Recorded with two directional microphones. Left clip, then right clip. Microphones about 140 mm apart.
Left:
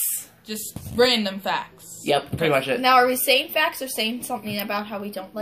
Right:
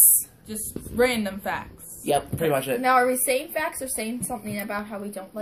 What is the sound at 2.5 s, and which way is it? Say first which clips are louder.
Speech: left 4 dB; 30° right (ahead or behind).